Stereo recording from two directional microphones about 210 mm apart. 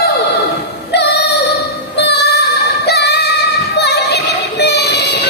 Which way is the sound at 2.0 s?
55° left (ahead or behind).